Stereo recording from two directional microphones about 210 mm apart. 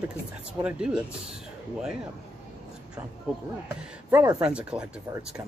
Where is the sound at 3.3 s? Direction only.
5° right (ahead or behind).